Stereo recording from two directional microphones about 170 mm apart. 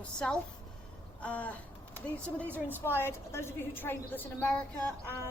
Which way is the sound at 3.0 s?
15° left (ahead or behind).